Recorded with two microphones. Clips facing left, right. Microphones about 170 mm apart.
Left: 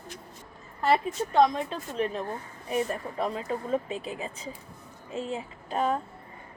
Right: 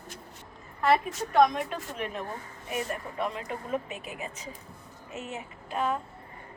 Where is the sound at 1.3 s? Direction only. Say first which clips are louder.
Even; 25° left (ahead or behind).